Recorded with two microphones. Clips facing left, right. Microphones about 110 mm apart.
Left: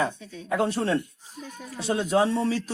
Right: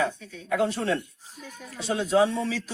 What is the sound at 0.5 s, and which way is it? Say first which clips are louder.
Speech: left 1 dB; 35° left (ahead or behind).